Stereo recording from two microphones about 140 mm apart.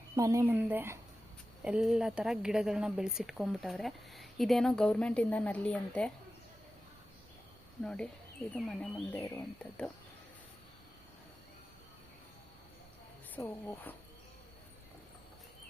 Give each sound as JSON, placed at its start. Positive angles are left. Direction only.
{"t": 0.2, "sound": "speech", "side_deg": -20}
{"t": 7.9, "sound": "speech", "side_deg": 5}
{"t": 13.4, "sound": "speech", "side_deg": 15}